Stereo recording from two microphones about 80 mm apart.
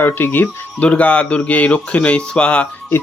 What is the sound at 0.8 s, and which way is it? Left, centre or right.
Speech, centre.